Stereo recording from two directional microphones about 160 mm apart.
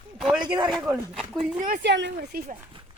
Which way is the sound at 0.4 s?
30° right (ahead or behind).